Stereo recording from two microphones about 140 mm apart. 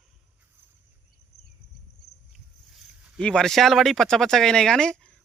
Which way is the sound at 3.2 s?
5° left (ahead or behind).